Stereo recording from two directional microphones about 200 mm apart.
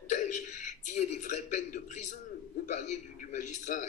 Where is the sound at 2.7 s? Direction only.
35° left (ahead or behind).